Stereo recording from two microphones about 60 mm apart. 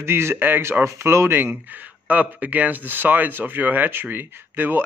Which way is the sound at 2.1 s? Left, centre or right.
Right.